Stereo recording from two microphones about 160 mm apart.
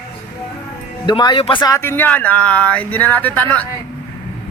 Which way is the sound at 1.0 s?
30° left (ahead or behind).